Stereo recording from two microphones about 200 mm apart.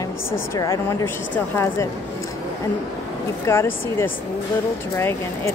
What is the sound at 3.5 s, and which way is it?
Speech, 10° left (ahead or behind).